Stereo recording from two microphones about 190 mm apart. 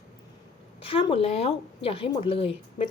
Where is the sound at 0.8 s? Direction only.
30° left (ahead or behind).